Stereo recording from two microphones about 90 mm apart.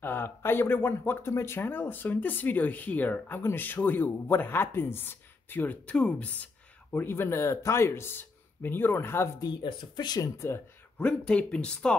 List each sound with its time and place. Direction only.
0.0 s speech: 25° left (ahead or behind)
9.4 s speech: 55° left (ahead or behind); by 10.6 s 35° left (ahead or behind)
11.0 s speech: 15° left (ahead or behind)